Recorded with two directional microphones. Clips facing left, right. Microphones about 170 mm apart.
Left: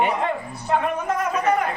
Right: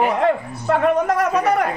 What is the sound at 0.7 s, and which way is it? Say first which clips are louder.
Speech: right 6 dB; 70° right (ahead or behind).